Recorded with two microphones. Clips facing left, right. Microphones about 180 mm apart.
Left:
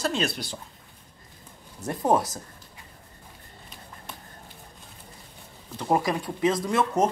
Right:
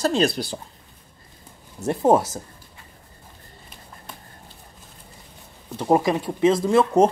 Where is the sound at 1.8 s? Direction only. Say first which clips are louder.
Right 5 dB; 25° right (ahead or behind).